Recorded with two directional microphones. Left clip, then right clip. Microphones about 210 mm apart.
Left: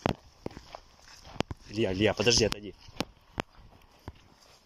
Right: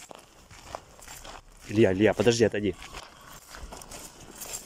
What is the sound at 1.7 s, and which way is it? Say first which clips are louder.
Speech: right 6 dB; 15° right (ahead or behind).